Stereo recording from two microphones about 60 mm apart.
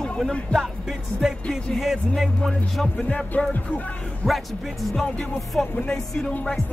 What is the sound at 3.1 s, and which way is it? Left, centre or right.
Speech, centre.